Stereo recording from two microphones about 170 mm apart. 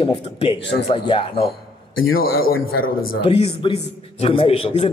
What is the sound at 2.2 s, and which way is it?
Speech, 60° left (ahead or behind).